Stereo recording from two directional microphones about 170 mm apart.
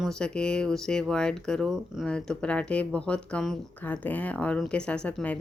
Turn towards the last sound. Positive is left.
turn(degrees=10)  # may be behind; listen again after turning